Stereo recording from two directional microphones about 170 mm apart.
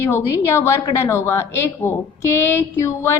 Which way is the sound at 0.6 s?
15° left (ahead or behind).